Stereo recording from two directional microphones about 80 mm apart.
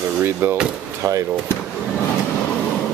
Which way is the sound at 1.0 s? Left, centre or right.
Right.